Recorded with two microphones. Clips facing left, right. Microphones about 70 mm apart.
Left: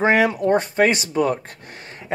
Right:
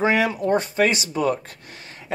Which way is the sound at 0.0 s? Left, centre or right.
Left.